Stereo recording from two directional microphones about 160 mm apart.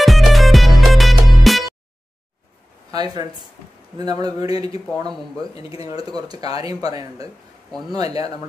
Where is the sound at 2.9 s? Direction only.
25° right (ahead or behind).